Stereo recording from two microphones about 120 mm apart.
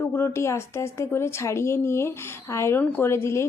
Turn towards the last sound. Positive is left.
turn(degrees=20)  # may be behind; listen again after turning